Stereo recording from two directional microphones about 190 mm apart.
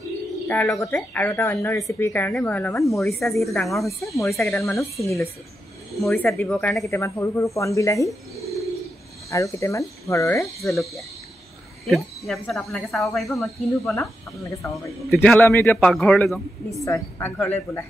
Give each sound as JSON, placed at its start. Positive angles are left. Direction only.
{"t": 0.5, "sound": "speech", "side_deg": 10}
{"t": 3.2, "sound": "speech", "side_deg": 0}
{"t": 5.0, "sound": "speech", "side_deg": 15}
{"t": 5.9, "sound": "speech", "side_deg": 0}
{"t": 6.9, "sound": "speech", "side_deg": 15}
{"t": 9.3, "sound": "speech", "side_deg": 15}
{"t": 11.8, "sound": "speech", "side_deg": 0}
{"t": 16.8, "sound": "speech", "side_deg": 15}